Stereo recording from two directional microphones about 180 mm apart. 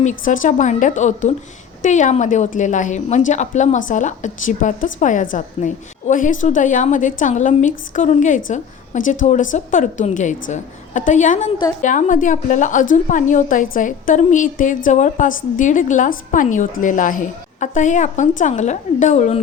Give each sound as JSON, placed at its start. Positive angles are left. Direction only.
{"t": 0.0, "sound": "a woman's voice", "side_deg": 40}